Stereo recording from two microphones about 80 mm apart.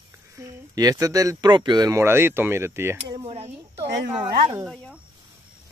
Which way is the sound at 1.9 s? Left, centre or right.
Right.